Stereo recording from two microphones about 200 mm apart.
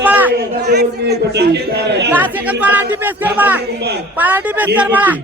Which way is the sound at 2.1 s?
10° right (ahead or behind).